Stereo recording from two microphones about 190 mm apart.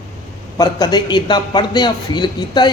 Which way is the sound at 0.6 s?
20° left (ahead or behind).